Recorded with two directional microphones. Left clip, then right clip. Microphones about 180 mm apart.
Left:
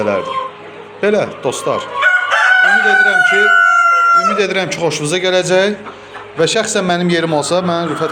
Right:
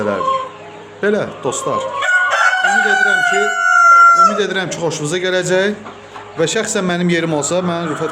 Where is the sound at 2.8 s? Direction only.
5° right (ahead or behind).